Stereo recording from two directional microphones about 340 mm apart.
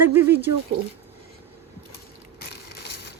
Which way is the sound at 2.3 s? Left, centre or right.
Left.